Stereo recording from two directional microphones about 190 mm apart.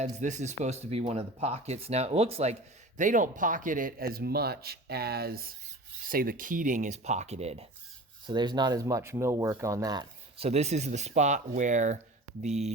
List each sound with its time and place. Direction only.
0.0 s speech: 40° right (ahead or behind)
8.3 s speech: 25° right (ahead or behind); by 11.9 s 40° right (ahead or behind)